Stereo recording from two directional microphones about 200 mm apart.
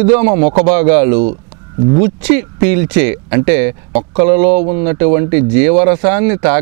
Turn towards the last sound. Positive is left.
turn(degrees=-10)  # may be behind; listen again after turning